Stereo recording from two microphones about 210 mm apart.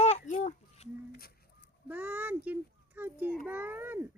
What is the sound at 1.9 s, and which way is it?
A child's voice, 5° right (ahead or behind).